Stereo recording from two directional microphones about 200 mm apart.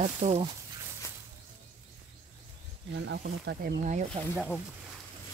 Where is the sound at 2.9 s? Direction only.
60° right (ahead or behind).